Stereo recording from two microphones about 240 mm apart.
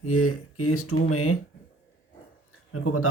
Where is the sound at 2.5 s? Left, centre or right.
Left.